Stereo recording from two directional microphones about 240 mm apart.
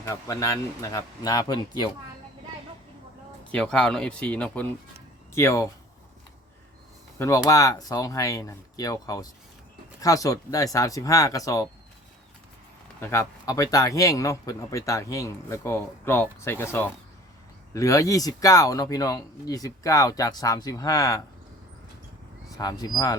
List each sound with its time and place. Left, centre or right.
0.0 s speech: centre
3.5 s speech: centre
7.2 s speech: centre
13.0 s speech: centre
17.7 s speech: centre
22.4 s speech: centre